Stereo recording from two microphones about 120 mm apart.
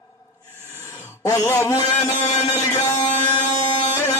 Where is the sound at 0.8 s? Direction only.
25° left (ahead or behind).